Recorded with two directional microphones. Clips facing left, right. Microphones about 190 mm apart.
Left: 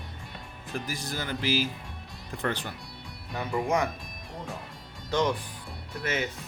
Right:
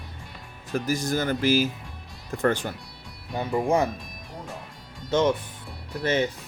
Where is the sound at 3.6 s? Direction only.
30° right (ahead or behind).